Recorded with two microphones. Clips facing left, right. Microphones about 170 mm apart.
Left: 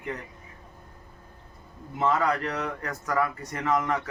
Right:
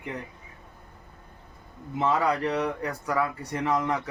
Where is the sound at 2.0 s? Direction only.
15° right (ahead or behind).